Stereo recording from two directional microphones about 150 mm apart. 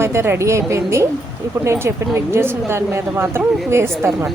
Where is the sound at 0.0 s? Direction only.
15° right (ahead or behind).